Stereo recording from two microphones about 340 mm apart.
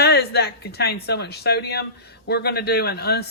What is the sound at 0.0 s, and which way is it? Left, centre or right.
Speech, left.